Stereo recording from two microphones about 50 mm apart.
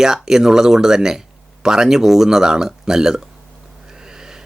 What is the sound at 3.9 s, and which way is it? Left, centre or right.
Owl, centre.